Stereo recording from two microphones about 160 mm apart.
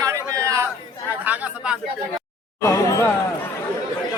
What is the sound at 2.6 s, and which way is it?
Speech, 20° left (ahead or behind).